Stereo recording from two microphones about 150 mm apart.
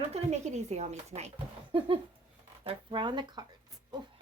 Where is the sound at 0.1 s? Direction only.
50° right (ahead or behind).